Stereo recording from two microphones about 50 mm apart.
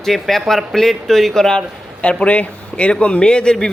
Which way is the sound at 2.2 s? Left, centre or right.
Left.